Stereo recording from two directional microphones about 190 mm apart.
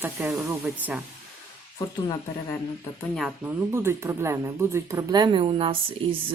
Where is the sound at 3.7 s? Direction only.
15° right (ahead or behind).